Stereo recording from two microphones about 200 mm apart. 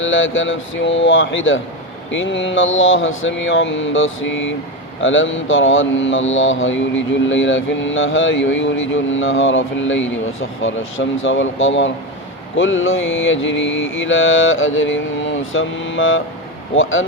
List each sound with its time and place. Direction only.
0.0 s speech: 70° left (ahead or behind)